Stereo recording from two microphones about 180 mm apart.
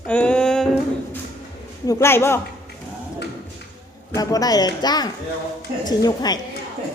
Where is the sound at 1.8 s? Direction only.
15° left (ahead or behind).